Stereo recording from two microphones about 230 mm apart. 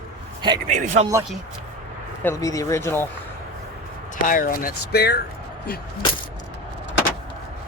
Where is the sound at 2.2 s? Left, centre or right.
Centre.